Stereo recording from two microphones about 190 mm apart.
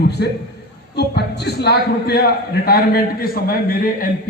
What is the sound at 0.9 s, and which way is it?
A man's voice, 60° left (ahead or behind).